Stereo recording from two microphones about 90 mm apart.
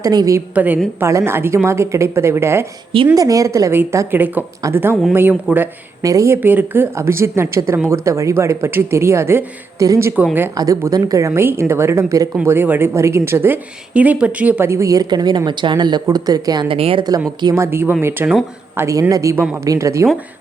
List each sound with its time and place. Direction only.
0.0 s a woman's voice: 40° right (ahead or behind)
0.5 s speech: 20° right (ahead or behind)
0.9 s speech: 30° right (ahead or behind)
3.2 s speech: 40° right (ahead or behind)
4.1 s speech: 20° right (ahead or behind)
6.0 s speech: 40° right (ahead or behind)
12.5 s speech: 25° right (ahead or behind)
13.9 s speech: 15° right (ahead or behind)
14.7 s speech: 35° right (ahead or behind)
15.1 s a woman's voice: 55° right (ahead or behind)
16.1 s a woman's voice: 45° right (ahead or behind)
16.6 s a woman's voice: 85° right
17.0 s a woman's voice: 45° right (ahead or behind)
17.5 s speech: 30° right (ahead or behind)